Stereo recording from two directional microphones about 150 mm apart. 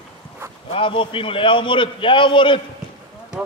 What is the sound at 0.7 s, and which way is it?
A man's voice, 35° left (ahead or behind).